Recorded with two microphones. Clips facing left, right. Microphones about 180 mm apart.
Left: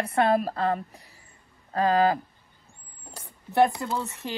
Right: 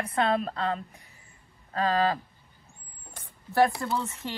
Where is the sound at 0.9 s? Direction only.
35° left (ahead or behind).